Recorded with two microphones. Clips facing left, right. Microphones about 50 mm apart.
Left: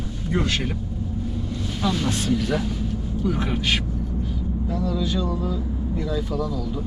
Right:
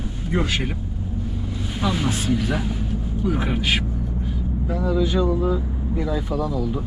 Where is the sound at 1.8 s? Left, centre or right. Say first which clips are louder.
Right 1 dB; centre.